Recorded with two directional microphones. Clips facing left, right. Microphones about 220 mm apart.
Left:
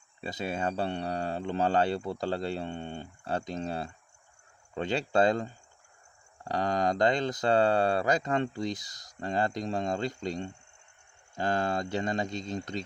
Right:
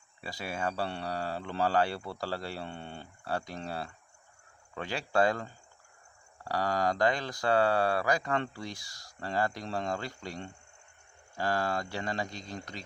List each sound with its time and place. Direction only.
0.2 s speech: 20° left (ahead or behind)